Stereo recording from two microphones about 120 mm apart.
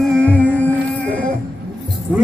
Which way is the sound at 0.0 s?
5° left (ahead or behind).